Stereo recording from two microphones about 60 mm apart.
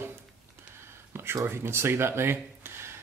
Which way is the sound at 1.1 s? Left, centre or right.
Right.